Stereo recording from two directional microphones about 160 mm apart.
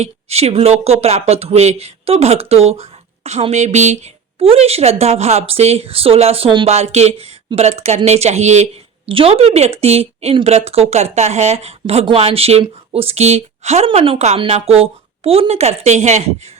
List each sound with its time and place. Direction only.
0.0 s speech: 40° right (ahead or behind)
6.7 s speech: 45° right (ahead or behind)